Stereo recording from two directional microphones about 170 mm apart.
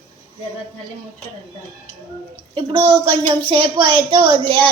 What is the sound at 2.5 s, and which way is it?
A woman's voice, 25° right (ahead or behind).